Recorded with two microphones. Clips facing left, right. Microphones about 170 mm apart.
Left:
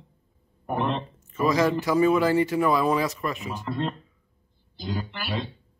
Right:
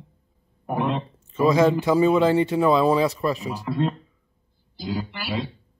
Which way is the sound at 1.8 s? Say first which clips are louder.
Right 3 dB; 30° right (ahead or behind).